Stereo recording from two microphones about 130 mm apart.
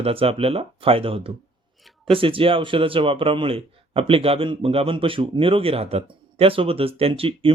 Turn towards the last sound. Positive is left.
turn(degrees=-45)  # may be behind; listen again after turning